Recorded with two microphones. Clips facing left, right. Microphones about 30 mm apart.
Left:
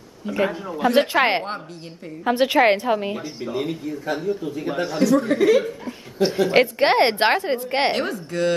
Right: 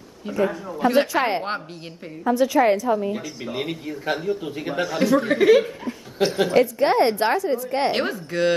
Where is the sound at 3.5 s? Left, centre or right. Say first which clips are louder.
Left 2 dB; right.